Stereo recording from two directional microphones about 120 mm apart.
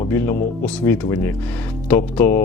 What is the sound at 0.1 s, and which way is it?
Speech, 20° left (ahead or behind).